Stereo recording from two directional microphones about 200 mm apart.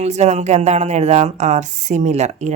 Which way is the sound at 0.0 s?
35° right (ahead or behind).